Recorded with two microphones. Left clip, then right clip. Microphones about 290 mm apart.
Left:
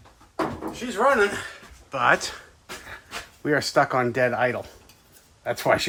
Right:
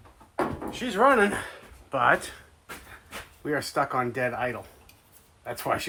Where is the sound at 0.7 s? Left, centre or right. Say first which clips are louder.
Even; right.